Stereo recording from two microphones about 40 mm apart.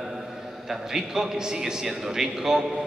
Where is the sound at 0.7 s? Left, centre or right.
Centre.